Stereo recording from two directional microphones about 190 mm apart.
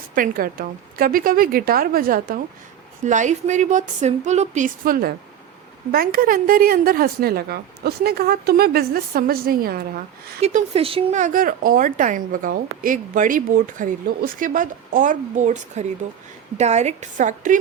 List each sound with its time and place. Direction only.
0.1 s a woman's voice: 45° right (ahead or behind)
10.4 s a woman's voice: 30° right (ahead or behind)